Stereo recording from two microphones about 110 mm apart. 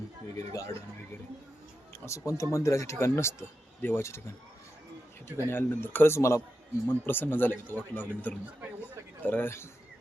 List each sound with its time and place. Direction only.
0.5 s speech: 30° left (ahead or behind)
1.9 s speech: 30° left (ahead or behind)
5.5 s speech: 20° left (ahead or behind)
8.8 s a sound: 15° left (ahead or behind)